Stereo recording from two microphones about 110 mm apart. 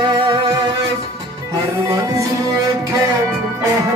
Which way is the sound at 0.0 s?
50° right (ahead or behind).